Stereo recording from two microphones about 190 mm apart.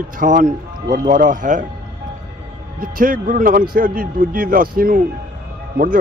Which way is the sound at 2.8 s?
45° right (ahead or behind).